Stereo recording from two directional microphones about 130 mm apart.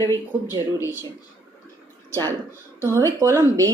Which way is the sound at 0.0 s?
25° left (ahead or behind).